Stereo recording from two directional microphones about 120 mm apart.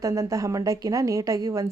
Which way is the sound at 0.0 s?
25° right (ahead or behind).